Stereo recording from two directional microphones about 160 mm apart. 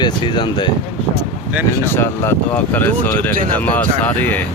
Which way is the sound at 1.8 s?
15° left (ahead or behind).